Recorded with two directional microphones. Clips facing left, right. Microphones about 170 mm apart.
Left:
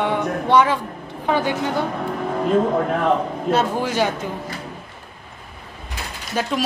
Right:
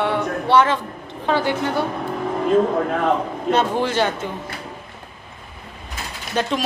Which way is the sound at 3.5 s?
10° left (ahead or behind).